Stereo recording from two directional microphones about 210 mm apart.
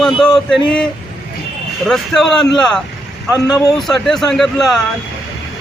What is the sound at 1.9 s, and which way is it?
Speech, 5° left (ahead or behind).